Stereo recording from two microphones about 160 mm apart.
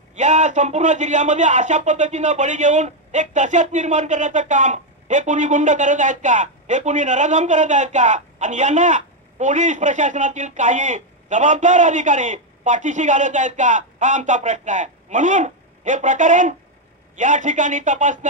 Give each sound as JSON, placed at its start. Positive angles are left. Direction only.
{"t": 0.1, "sound": "a man's voice", "side_deg": -50}